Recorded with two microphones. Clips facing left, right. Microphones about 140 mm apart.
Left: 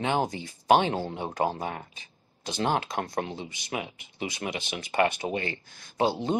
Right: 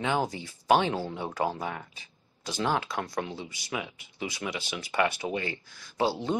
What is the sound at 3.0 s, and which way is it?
Speech, 45° left (ahead or behind).